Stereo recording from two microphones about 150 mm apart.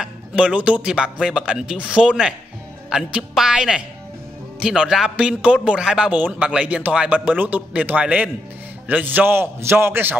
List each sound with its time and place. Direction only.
0.0 s speech: 5° right (ahead or behind)